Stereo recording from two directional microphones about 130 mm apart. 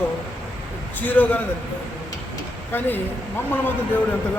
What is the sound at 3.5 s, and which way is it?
Speech, 15° left (ahead or behind).